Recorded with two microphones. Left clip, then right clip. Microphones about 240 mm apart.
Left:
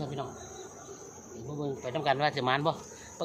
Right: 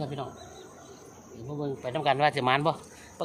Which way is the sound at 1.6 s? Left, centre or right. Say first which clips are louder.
Right 2 dB; right.